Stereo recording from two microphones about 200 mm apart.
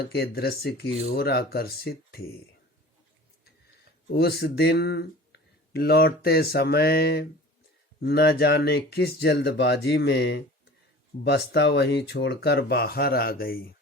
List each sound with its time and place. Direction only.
0.0 s speech: 55° left (ahead or behind)
4.1 s speech: 55° left (ahead or behind)